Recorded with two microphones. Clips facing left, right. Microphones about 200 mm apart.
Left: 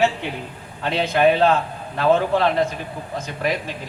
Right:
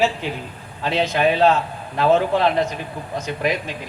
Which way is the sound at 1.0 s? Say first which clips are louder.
Left 1 dB; 55° left (ahead or behind).